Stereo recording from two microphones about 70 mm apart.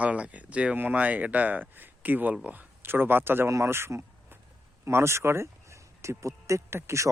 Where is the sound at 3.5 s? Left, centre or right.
Right.